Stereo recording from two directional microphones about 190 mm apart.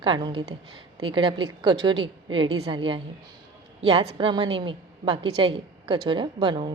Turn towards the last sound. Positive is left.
turn(degrees=-25)  # may be behind; listen again after turning